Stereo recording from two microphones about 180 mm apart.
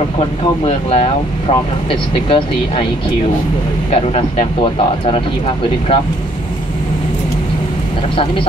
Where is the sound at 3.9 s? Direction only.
30° left (ahead or behind).